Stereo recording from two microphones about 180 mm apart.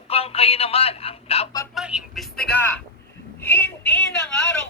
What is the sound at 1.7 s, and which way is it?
Speech, 5° right (ahead or behind).